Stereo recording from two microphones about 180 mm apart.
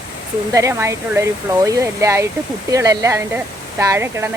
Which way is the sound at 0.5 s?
15° right (ahead or behind).